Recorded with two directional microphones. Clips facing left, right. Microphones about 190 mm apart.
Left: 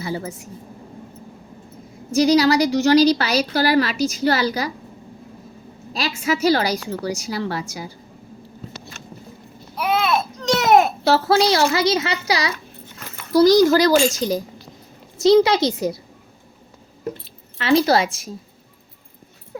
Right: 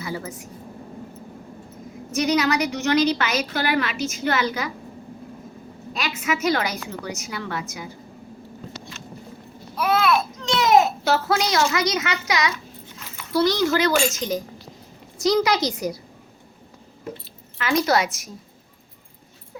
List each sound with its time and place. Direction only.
0.0 s a woman's voice: 30° left (ahead or behind)
2.1 s a woman's voice: 30° left (ahead or behind)
5.9 s a woman's voice: 30° left (ahead or behind)
8.9 s a sound: 50° left (ahead or behind)
9.7 s a sound: 15° left (ahead or behind)
10.4 s baby cry: 50° left (ahead or behind)
11.0 s a woman's voice: 30° left (ahead or behind)
13.0 s a sound: 55° left (ahead or behind)
13.3 s a woman's voice: 40° left (ahead or behind)
17.6 s a woman's voice: 30° left (ahead or behind)